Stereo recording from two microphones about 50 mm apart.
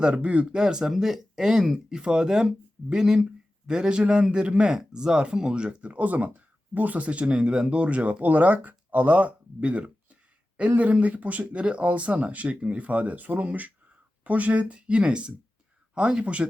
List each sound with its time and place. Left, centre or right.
0.0 s speech: right
0.5 s speech: centre